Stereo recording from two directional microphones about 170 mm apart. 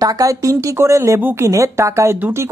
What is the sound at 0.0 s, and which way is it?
A woman's voice, 20° right (ahead or behind).